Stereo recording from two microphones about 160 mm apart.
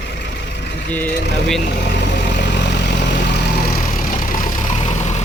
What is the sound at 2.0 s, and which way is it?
Vehicle, 90° left.